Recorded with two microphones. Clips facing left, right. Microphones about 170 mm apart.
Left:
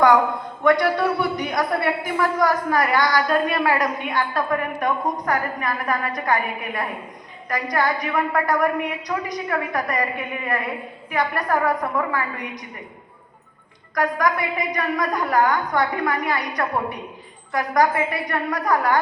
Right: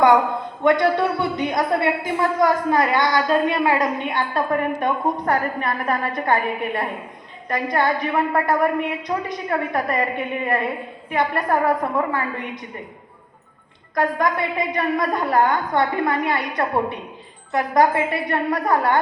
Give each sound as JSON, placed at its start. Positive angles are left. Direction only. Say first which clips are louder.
{"t": 0.6, "sound": "a woman's voice", "louder": "right 1 dB", "side_deg": -25}
{"t": 13.9, "sound": "a woman's voice", "louder": "right 1 dB", "side_deg": -25}